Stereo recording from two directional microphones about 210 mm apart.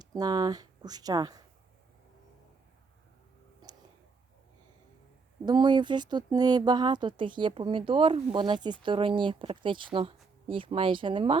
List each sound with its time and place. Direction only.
0.0 s speech: 20° right (ahead or behind)
5.5 s speech: 20° right (ahead or behind)